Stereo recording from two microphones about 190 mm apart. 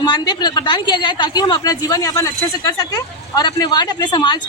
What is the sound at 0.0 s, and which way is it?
Speech, 20° left (ahead or behind).